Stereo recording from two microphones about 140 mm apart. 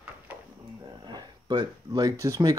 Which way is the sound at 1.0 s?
30° right (ahead or behind).